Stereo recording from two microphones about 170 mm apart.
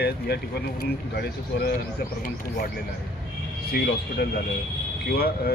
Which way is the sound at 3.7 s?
65° left (ahead or behind).